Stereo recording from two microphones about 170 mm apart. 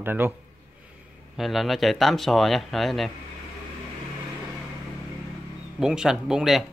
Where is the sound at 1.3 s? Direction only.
Centre (ahead or behind).